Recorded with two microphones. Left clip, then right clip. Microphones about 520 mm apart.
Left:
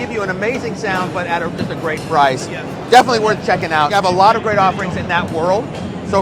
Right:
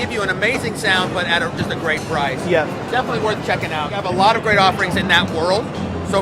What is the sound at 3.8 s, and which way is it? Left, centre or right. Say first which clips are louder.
Speech: left 9 dB; left.